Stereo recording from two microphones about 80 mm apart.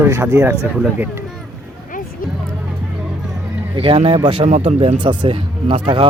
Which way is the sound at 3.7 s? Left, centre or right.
Right.